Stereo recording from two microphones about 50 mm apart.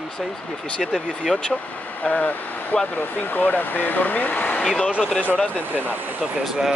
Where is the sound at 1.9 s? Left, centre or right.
Left.